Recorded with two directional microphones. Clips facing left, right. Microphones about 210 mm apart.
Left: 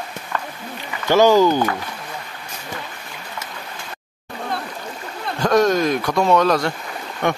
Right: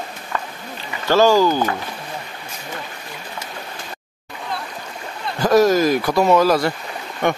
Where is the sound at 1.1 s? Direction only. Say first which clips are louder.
Left 1 dB; 20° left (ahead or behind).